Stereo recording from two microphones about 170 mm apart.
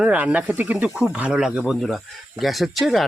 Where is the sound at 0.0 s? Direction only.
5° right (ahead or behind).